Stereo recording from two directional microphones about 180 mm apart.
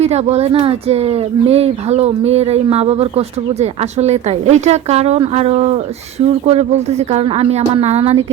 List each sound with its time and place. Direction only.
0.0 s speech: 35° right (ahead or behind)